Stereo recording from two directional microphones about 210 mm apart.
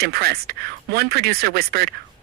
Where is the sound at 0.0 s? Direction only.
45° right (ahead or behind).